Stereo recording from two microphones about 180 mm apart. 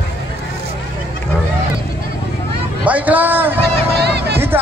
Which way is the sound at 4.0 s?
65° right (ahead or behind).